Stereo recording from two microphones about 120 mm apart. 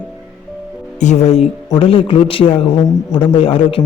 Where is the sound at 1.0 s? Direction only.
75° left (ahead or behind).